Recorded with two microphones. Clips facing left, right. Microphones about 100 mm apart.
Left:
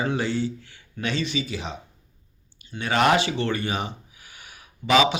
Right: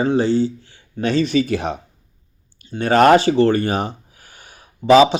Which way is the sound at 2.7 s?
40° right (ahead or behind).